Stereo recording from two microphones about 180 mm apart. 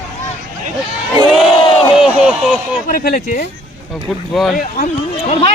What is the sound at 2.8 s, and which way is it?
Speech, 55° left (ahead or behind).